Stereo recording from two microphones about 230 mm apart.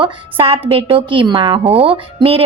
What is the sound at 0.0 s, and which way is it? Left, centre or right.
A woman's voice, right.